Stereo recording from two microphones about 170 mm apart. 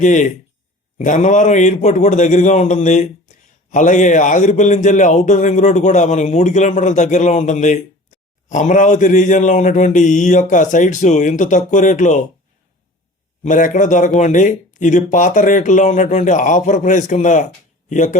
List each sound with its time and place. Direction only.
0.0 s a man's voice: 45° left (ahead or behind)
13.4 s a man's voice: 50° left (ahead or behind)